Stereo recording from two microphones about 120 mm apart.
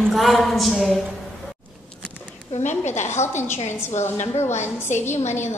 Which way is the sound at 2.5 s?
75° left (ahead or behind).